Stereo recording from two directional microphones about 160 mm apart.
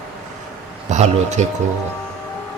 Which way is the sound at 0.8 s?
45° right (ahead or behind).